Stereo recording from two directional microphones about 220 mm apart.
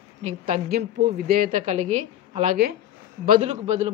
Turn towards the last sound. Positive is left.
turn(degrees=-30)  # may be behind; listen again after turning